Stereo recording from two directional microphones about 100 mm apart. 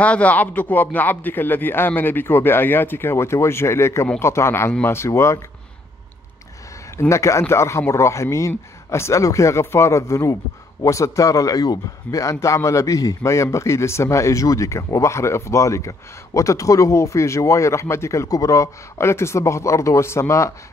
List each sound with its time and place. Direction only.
0.0 s a man's voice: 15° left (ahead or behind)
7.0 s a man's voice: 30° left (ahead or behind)